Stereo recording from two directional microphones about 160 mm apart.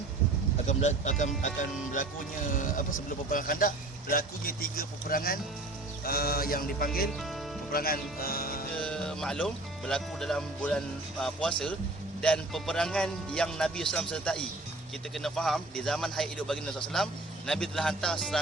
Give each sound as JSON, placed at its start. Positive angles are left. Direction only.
{"t": 0.7, "sound": "speech", "side_deg": 45}
{"t": 6.1, "sound": "music", "side_deg": 70}
{"t": 7.7, "sound": "speech", "side_deg": 65}
{"t": 8.7, "sound": "speech", "side_deg": 5}